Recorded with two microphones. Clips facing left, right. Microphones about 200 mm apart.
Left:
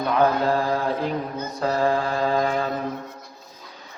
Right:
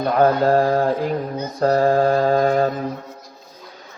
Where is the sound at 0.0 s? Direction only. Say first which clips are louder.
Right 4 dB; 45° right (ahead or behind).